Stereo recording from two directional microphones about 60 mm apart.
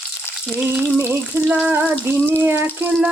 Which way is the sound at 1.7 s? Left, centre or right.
Right.